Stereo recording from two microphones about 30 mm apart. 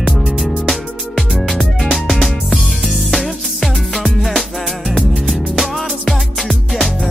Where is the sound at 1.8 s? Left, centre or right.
Centre.